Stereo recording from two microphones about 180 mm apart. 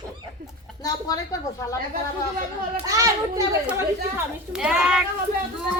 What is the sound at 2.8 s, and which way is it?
Speech, 20° right (ahead or behind).